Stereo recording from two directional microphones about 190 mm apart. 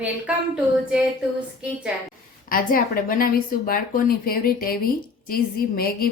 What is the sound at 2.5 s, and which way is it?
Speech, 50° left (ahead or behind).